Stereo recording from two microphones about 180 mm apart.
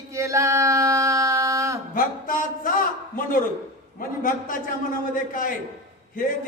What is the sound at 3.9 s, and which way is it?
A man's voice, 50° left (ahead or behind).